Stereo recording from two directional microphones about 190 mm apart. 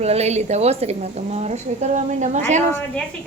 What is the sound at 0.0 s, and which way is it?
A woman's voice, 35° right (ahead or behind).